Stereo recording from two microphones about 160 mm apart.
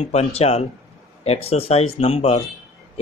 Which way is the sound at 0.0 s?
40° left (ahead or behind).